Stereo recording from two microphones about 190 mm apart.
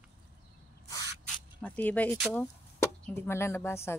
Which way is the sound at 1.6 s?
5° left (ahead or behind).